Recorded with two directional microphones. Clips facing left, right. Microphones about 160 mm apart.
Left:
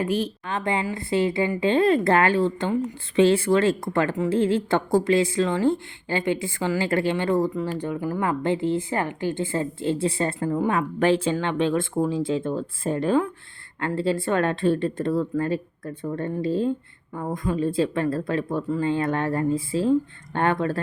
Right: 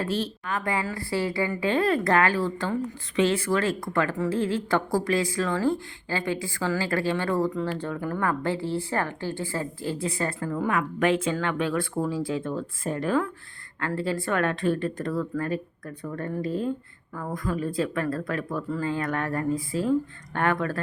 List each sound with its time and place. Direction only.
0.0 s a woman's voice: 15° left (ahead or behind)
0.4 s speech: 25° left (ahead or behind)